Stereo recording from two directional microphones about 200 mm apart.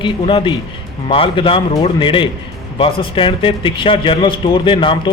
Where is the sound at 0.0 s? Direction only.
25° left (ahead or behind).